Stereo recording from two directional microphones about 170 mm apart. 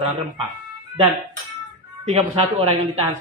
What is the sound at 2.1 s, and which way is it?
Speech, 30° right (ahead or behind).